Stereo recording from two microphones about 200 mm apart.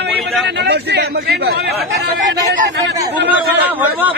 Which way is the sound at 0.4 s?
55° right (ahead or behind).